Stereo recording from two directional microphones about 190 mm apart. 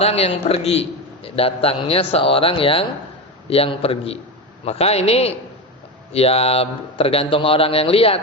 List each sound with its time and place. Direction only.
0.0 s a man's voice: 35° left (ahead or behind)